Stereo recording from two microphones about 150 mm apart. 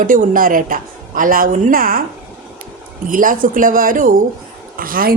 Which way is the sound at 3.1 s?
65° right (ahead or behind).